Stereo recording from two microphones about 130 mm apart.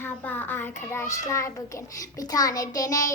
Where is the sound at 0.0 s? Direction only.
15° left (ahead or behind).